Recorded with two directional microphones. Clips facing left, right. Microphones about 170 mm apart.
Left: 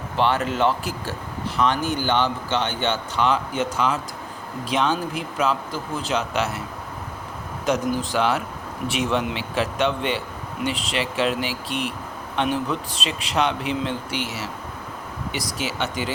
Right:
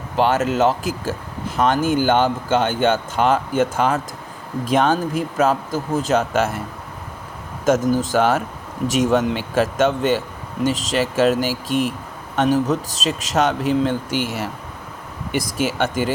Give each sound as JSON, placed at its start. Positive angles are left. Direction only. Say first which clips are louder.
{"t": 0.2, "sound": "speech", "louder": "right 4 dB", "side_deg": -45}
{"t": 7.6, "sound": "speech", "louder": "right 6 dB", "side_deg": -45}